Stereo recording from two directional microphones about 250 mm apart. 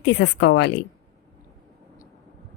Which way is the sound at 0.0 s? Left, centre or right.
Left.